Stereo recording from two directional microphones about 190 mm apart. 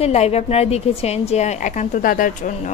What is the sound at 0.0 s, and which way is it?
A woman's voice, 35° left (ahead or behind).